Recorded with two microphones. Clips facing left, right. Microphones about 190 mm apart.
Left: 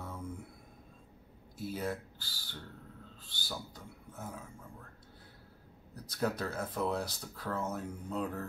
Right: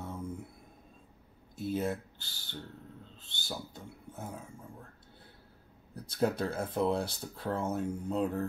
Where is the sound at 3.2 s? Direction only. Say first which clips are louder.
Right 2 dB; 25° right (ahead or behind).